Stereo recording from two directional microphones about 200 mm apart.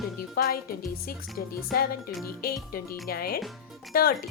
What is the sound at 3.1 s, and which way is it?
Speech, 50° left (ahead or behind).